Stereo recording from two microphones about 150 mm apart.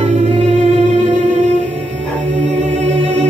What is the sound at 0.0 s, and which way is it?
Music, 45° right (ahead or behind).